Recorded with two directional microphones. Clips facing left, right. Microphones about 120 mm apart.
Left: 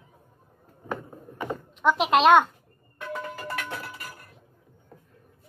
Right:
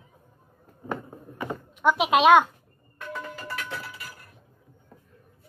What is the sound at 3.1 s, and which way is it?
Music, 55° left (ahead or behind).